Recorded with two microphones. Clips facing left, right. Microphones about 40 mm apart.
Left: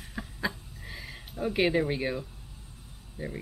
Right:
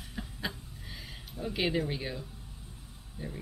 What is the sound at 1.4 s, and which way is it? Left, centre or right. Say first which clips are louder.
Speech: left 5 dB; left.